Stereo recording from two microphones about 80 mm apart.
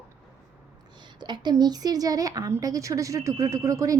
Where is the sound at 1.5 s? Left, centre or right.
Right.